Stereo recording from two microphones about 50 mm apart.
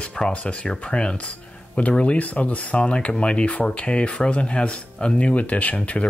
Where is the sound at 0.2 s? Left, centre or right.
Centre.